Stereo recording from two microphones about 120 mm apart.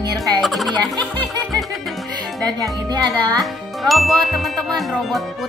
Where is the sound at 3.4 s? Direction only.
Centre (ahead or behind).